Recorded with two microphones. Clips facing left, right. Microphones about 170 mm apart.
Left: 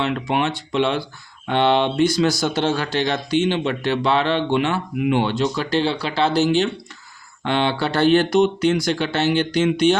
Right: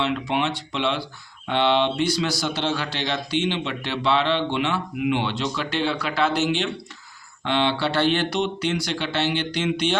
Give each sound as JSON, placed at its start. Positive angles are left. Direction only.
{"t": 0.0, "sound": "speech", "side_deg": 50}
{"t": 7.4, "sound": "speech", "side_deg": 45}